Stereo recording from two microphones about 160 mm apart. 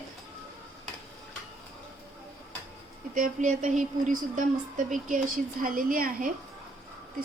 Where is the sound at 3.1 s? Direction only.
55° right (ahead or behind).